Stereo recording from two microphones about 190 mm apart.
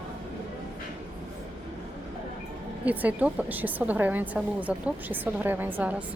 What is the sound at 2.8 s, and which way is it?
A woman's voice, 10° right (ahead or behind).